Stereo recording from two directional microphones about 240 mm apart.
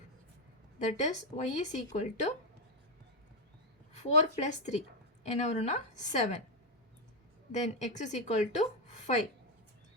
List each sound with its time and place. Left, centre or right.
0.9 s speech: left
3.9 s speech: left
7.5 s speech: left